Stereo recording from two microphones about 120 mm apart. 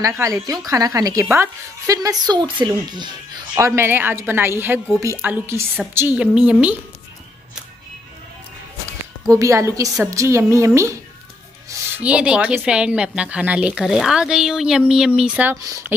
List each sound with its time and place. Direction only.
0.0 s a woman's voice: 25° right (ahead or behind)
2.0 s a woman's voice: 35° right (ahead or behind)
3.5 s a woman's voice: 25° right (ahead or behind)
9.3 s a woman's voice: 25° right (ahead or behind)
12.0 s speech: 10° right (ahead or behind)